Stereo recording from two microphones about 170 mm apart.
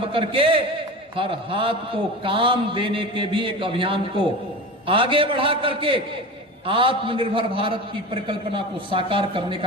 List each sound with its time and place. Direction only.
0.0 s a man's voice: 30° right (ahead or behind)